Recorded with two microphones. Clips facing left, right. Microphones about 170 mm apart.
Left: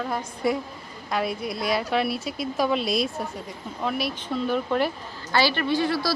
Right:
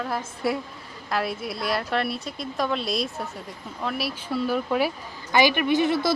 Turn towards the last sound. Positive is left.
turn(degrees=-20)  # may be behind; listen again after turning